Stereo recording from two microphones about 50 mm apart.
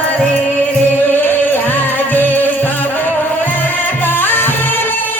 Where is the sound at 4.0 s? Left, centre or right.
Left.